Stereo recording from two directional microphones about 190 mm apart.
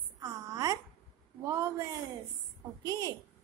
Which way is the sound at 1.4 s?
15° right (ahead or behind).